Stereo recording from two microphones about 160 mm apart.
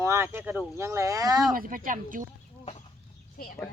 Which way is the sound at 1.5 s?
60° right (ahead or behind).